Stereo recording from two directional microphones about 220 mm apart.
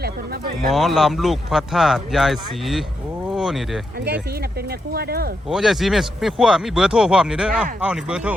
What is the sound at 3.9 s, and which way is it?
Speech, 45° right (ahead or behind).